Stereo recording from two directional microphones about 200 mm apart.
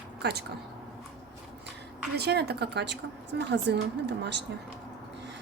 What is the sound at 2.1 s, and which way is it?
A woman's voice, 55° right (ahead or behind).